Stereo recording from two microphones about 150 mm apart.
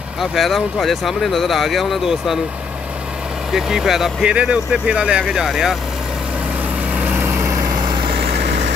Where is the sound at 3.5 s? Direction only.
5° right (ahead or behind).